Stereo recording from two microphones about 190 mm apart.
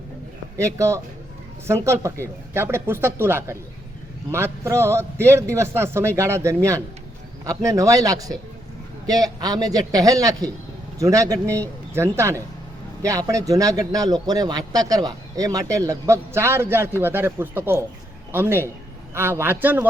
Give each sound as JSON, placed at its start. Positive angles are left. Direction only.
{"t": 0.5, "sound": "a man's voice", "side_deg": -15}